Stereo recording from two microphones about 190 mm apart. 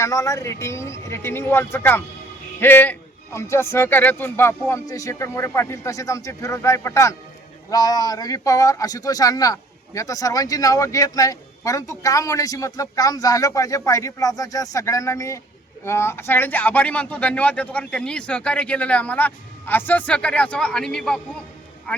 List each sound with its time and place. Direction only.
0.0 s speech: 15° left (ahead or behind)